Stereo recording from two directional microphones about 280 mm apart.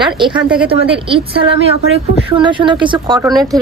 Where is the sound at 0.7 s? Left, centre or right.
Centre.